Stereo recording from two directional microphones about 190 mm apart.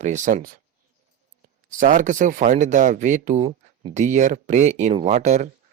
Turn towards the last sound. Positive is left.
turn(degrees=-35)  # may be behind; listen again after turning